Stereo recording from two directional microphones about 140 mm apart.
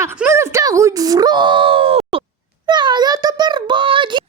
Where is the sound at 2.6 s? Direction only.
30° right (ahead or behind).